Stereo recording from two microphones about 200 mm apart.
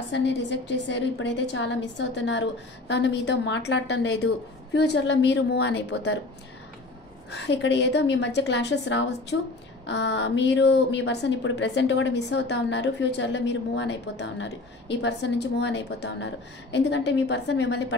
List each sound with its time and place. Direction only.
0.1 s a woman's voice: 60° left (ahead or behind)
7.2 s a woman's voice: 60° left (ahead or behind)